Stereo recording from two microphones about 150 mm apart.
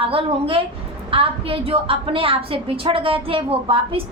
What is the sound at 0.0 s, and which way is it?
A woman's voice, 40° right (ahead or behind).